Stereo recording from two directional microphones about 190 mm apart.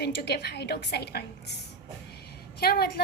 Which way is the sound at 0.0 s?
60° left (ahead or behind).